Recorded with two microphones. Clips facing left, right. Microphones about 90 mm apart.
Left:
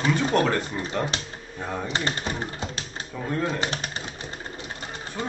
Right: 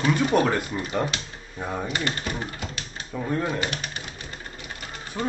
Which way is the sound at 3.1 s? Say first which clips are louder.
Right 1 dB; 5° right (ahead or behind).